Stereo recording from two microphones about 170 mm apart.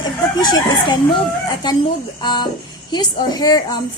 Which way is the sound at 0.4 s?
25° left (ahead or behind).